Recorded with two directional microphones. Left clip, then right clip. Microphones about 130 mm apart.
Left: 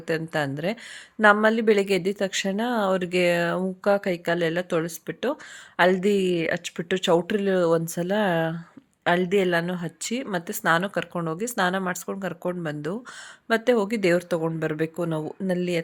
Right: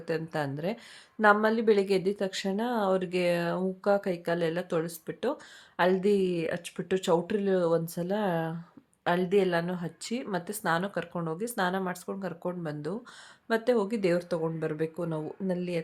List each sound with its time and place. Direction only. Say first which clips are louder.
0.1 s speech: left 6 dB; 25° left (ahead or behind)